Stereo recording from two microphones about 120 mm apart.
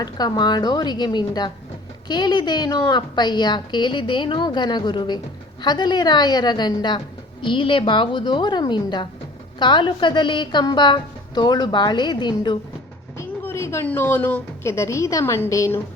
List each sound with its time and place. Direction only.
0.0 s a woman's voice: 35° left (ahead or behind)
13.1 s a woman's voice: 20° left (ahead or behind)